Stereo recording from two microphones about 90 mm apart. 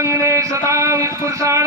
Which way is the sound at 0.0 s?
35° right (ahead or behind).